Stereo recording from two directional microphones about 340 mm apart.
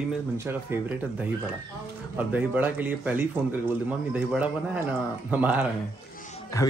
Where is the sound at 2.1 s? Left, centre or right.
Centre.